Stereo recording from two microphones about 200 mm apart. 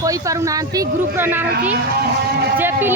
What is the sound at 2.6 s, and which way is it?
Speech, 10° right (ahead or behind).